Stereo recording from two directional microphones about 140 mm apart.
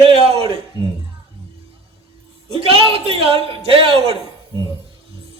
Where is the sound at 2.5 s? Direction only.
45° right (ahead or behind).